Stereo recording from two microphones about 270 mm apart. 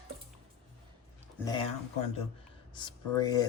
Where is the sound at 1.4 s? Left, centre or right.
Centre.